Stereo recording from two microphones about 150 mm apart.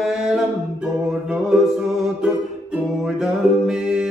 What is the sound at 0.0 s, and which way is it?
Music, 5° right (ahead or behind).